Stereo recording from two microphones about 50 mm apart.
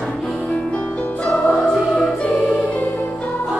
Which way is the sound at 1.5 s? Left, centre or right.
Centre.